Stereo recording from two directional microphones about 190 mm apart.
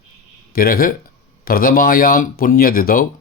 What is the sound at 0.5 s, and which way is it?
Speech, 50° left (ahead or behind).